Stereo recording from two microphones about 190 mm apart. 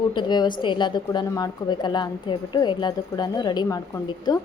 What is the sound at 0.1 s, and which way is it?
A woman's voice, 25° left (ahead or behind).